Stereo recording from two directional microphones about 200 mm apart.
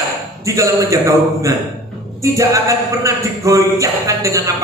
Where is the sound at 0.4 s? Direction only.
15° right (ahead or behind).